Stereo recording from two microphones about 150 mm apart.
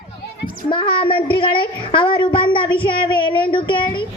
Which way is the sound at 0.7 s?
35° left (ahead or behind).